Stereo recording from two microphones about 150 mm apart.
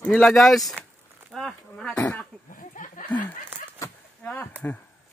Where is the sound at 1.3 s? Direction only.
5° left (ahead or behind).